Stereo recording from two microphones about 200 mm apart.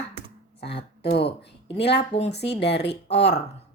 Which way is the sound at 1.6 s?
60° left (ahead or behind).